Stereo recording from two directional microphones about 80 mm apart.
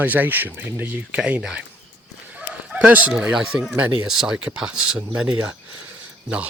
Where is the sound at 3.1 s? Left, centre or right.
Centre.